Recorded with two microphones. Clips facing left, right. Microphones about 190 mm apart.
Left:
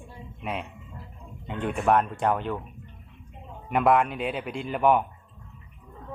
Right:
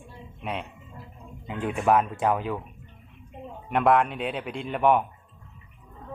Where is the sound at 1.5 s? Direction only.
Centre (ahead or behind).